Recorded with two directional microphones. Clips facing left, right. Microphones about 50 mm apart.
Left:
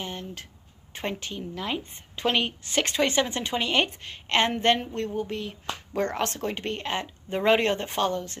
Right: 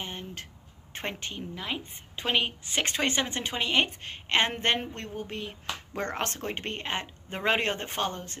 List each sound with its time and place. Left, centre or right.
0.0 s a sound: right
0.9 s speech: right
2.1 s a woman's voice: centre
2.8 s speech: right
3.5 s a woman's voice: centre
4.5 s a woman's voice: right
5.2 s a woman's voice: centre
5.9 s speech: right